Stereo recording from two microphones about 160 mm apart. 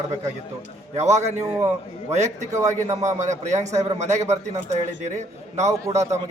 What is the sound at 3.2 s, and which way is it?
A man's voice, 50° right (ahead or behind).